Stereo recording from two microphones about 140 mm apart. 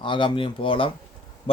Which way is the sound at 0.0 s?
35° left (ahead or behind).